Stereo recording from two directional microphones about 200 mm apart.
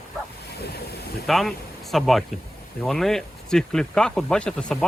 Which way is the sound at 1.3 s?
Centre (ahead or behind).